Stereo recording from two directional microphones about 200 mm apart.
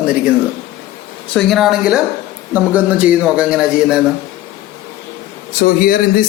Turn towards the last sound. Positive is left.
turn(degrees=45)  # may be behind; listen again after turning